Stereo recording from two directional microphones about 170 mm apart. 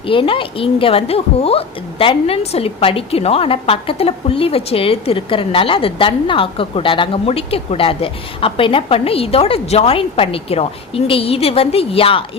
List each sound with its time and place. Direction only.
0.0 s speech: 30° left (ahead or behind)